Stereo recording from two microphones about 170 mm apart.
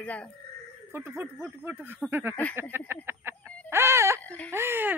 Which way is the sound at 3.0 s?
15° right (ahead or behind).